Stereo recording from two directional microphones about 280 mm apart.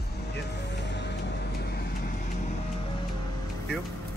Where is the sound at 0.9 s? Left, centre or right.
Left.